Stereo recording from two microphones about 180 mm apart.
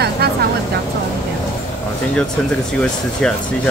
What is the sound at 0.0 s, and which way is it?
Vehicle, 60° right (ahead or behind).